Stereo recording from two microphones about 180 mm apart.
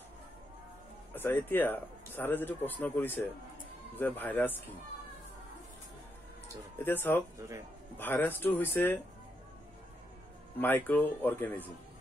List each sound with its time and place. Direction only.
1.1 s speech: 10° left (ahead or behind)
6.8 s speech: 10° left (ahead or behind)
7.3 s speech: 15° right (ahead or behind)
8.0 s speech: 10° left (ahead or behind)
10.6 s speech: 10° left (ahead or behind)